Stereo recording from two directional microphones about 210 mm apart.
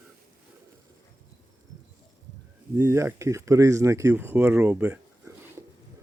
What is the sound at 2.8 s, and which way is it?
Speech, 15° right (ahead or behind).